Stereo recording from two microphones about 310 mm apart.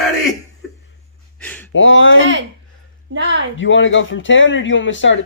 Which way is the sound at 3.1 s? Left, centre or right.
Right.